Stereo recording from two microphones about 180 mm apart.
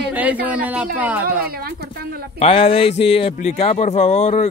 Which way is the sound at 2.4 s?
30° left (ahead or behind).